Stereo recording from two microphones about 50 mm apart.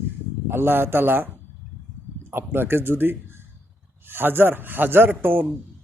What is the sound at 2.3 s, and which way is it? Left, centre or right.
A man's voice, right.